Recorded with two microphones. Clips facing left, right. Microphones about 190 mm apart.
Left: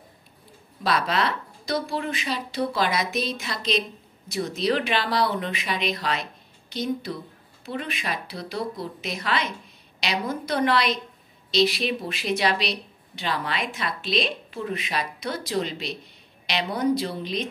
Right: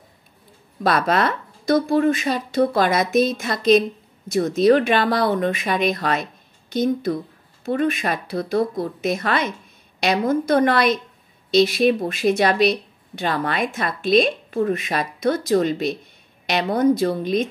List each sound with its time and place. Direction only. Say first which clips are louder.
0.8 s speech: right 5 dB; 50° right (ahead or behind)